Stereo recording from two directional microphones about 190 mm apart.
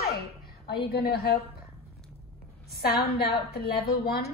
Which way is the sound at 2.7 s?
55° left (ahead or behind).